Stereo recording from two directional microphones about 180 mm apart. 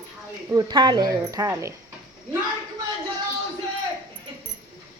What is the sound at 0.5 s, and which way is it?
Speech, 25° right (ahead or behind).